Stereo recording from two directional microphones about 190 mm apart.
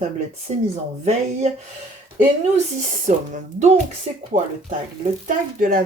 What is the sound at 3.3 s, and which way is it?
Speech, 40° right (ahead or behind).